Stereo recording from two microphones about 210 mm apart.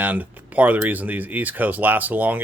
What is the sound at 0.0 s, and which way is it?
Speech, 5° right (ahead or behind).